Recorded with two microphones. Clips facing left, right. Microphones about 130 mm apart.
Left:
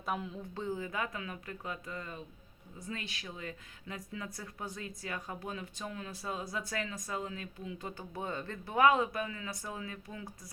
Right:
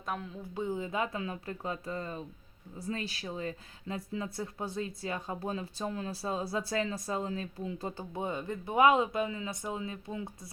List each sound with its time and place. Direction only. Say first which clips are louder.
0.0 s speech: left 1 dB; 5° left (ahead or behind)
0.5 s speech: right 4 dB; 15° right (ahead or behind)
8.2 s speech: right 4 dB; 15° right (ahead or behind)